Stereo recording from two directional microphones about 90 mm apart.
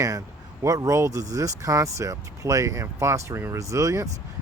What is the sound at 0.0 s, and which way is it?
Speech, 40° right (ahead or behind).